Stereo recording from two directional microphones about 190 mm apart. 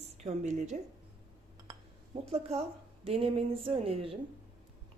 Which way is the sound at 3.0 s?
30° right (ahead or behind).